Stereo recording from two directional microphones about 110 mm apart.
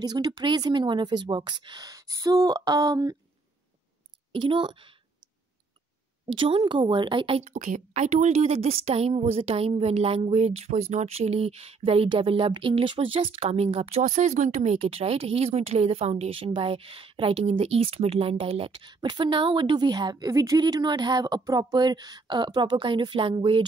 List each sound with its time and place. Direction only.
0.0 s a woman's voice: 35° right (ahead or behind)
1.9 s a woman's voice: 30° right (ahead or behind)
4.3 s a woman's voice: 50° right (ahead or behind)
6.3 s speech: 50° right (ahead or behind)
18.9 s a woman's voice: 45° right (ahead or behind)